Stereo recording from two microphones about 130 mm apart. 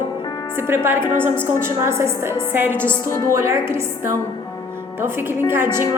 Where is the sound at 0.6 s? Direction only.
20° right (ahead or behind).